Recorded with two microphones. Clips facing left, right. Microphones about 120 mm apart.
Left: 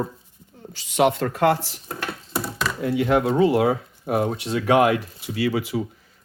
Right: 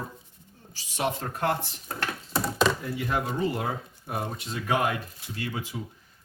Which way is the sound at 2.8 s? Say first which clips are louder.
Left 10 dB; 85° left.